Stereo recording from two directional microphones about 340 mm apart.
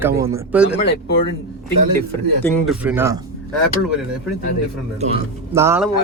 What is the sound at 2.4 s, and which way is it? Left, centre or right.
Speech, centre.